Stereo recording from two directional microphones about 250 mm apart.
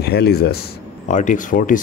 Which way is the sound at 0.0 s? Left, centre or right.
Left.